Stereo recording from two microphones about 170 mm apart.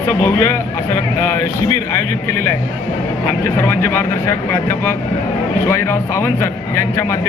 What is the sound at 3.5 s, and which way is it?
Speech, 15° left (ahead or behind).